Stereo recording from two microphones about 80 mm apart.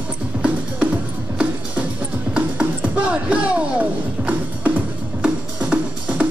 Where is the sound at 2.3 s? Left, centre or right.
Centre.